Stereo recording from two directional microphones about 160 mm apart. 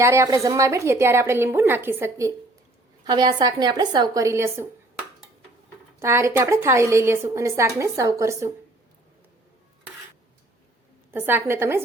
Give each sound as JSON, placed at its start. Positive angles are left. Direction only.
{"t": 0.0, "sound": "a woman's voice", "side_deg": -20}
{"t": 3.0, "sound": "a woman's voice", "side_deg": -25}
{"t": 6.0, "sound": "a woman's voice", "side_deg": -15}
{"t": 11.1, "sound": "a woman's voice", "side_deg": -15}